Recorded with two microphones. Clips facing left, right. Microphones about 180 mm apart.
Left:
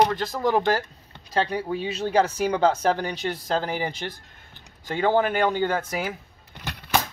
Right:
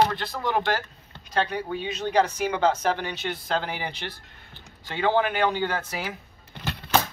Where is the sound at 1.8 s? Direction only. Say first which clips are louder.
Left 3 dB; 30° left (ahead or behind).